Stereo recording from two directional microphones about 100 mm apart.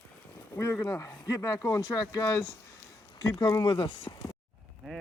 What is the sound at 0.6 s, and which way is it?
Speech, 30° left (ahead or behind).